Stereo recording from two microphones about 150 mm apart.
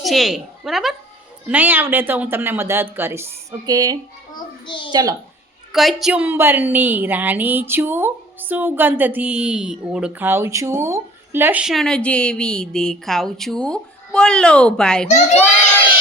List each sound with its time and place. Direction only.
0.0 s a woman's voice: centre (ahead or behind)
3.7 s a child's voice: 25° right (ahead or behind)
4.4 s a child's voice: 30° left (ahead or behind)
4.9 s a child's voice: 25° right (ahead or behind)
5.7 s a woman's voice: centre (ahead or behind)
15.0 s a child's voice: 50° left (ahead or behind)